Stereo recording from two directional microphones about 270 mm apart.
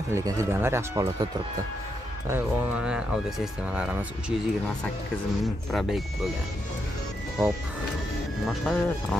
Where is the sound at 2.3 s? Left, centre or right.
Centre.